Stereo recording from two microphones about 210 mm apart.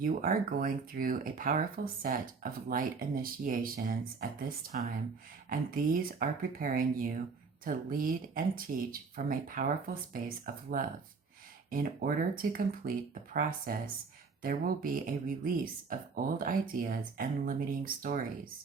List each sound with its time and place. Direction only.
0.0 s speech: 40° right (ahead or behind)